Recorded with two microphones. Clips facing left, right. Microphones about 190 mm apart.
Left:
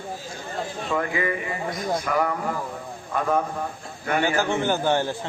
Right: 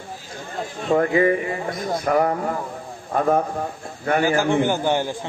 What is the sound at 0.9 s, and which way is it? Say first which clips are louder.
Speech: right 9 dB; 40° right (ahead or behind).